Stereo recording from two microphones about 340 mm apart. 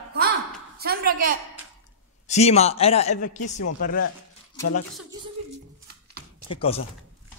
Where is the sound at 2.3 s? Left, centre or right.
Centre.